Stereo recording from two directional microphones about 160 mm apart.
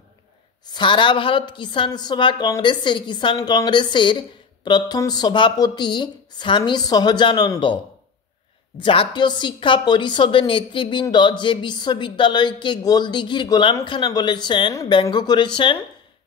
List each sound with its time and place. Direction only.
0.7 s a woman's voice: 30° left (ahead or behind)